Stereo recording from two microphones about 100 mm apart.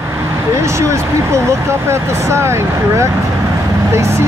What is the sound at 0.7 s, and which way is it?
Speech, 30° right (ahead or behind).